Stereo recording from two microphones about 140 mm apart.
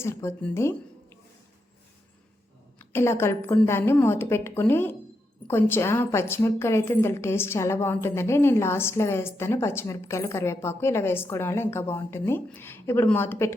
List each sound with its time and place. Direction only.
0.0 s a woman's voice: 20° left (ahead or behind)
0.5 s a sound: 20° left (ahead or behind)
2.7 s a woman's voice: 15° left (ahead or behind)